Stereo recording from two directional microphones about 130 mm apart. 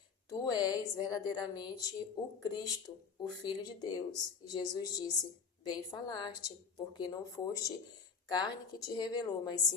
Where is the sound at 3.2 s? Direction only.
30° left (ahead or behind).